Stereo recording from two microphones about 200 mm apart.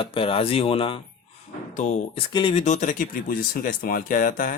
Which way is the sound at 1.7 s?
35° left (ahead or behind).